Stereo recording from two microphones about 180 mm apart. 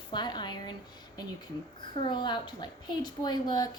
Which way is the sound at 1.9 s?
25° left (ahead or behind).